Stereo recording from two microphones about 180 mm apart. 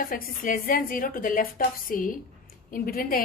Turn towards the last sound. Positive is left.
turn(degrees=55)  # may be behind; listen again after turning